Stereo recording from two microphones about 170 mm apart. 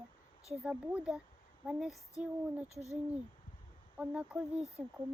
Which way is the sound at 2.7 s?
40° right (ahead or behind).